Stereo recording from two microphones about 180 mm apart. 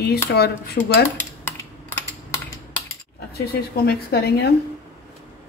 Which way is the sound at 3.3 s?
60° left (ahead or behind).